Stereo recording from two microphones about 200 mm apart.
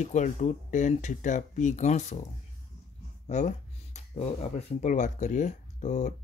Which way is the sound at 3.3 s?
35° left (ahead or behind).